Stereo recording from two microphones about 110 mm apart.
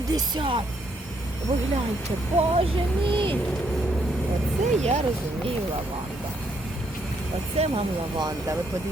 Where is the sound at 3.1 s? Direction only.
50° right (ahead or behind).